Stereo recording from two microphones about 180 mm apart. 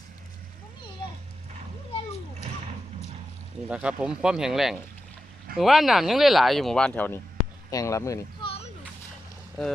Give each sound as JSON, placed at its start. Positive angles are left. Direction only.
{"t": 3.7, "sound": "speech", "side_deg": -5}
{"t": 8.4, "sound": "a sound", "side_deg": 30}
{"t": 9.6, "sound": "speech", "side_deg": 0}